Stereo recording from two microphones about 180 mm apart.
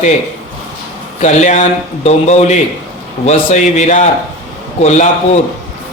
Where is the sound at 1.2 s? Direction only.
40° left (ahead or behind).